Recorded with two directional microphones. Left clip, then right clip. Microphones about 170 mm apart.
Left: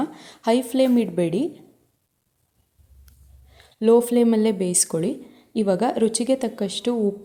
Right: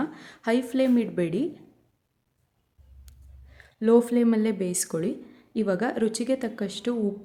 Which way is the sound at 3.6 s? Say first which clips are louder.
Left 4 dB; 20° left (ahead or behind).